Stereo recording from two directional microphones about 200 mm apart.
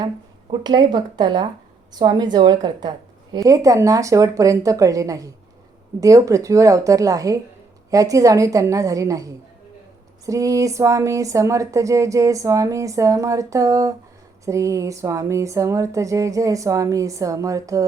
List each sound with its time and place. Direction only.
0.5 s a woman's voice: 20° right (ahead or behind)